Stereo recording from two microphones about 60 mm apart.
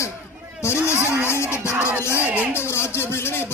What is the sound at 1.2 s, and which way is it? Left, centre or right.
Music, left.